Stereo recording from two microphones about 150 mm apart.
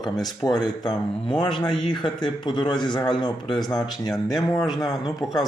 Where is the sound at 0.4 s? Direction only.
25° left (ahead or behind).